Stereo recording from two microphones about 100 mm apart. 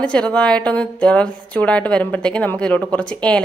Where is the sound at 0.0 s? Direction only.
10° left (ahead or behind).